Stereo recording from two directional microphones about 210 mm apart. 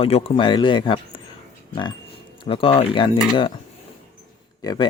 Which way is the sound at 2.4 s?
25° left (ahead or behind).